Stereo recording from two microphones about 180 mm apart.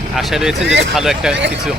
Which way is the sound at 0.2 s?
Centre (ahead or behind).